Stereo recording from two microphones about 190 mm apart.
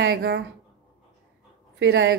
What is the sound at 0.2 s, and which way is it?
Speech, 55° right (ahead or behind).